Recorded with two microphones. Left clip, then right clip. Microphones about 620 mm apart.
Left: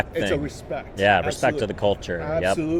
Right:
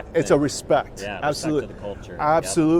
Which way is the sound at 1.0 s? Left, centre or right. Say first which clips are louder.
Left 6 dB; left.